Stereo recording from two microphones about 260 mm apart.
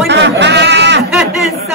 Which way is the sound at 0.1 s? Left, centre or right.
Right.